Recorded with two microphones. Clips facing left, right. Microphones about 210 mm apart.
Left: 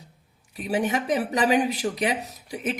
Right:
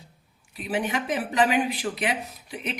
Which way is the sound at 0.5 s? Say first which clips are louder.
Left 3 dB; 40° left (ahead or behind).